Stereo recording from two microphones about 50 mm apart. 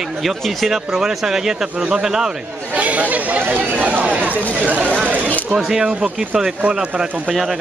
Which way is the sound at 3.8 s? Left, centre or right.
Right.